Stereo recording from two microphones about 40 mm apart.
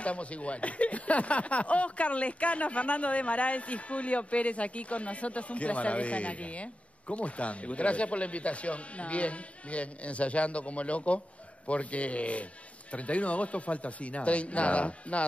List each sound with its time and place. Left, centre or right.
0.0 s speech: left